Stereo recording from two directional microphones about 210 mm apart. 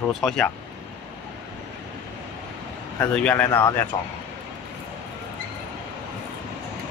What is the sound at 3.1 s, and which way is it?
Speech, 5° left (ahead or behind).